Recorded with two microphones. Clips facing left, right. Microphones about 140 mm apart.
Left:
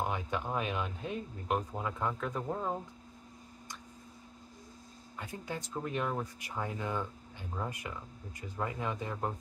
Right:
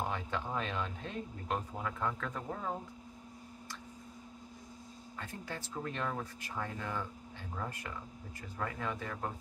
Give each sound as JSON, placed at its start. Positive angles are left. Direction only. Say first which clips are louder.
{"t": 0.1, "sound": "speech", "louder": "left 2 dB", "side_deg": 15}
{"t": 5.2, "sound": "speech", "louder": "left 3 dB", "side_deg": 15}